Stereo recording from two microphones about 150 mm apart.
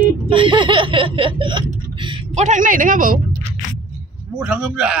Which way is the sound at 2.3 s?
55° right (ahead or behind).